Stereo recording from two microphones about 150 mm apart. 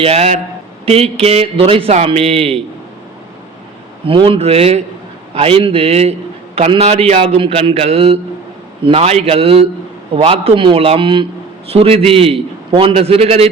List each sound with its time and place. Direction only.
0.0 s a man's voice: 45° right (ahead or behind)
4.0 s a man's voice: 35° right (ahead or behind)